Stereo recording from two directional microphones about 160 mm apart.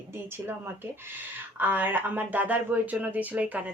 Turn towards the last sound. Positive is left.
turn(degrees=-10)  # may be behind; listen again after turning